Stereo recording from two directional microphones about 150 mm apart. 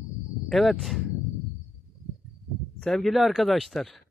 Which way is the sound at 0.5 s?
Centre (ahead or behind).